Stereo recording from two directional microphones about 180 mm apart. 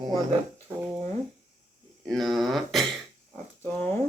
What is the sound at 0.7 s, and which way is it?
Speech, 10° right (ahead or behind).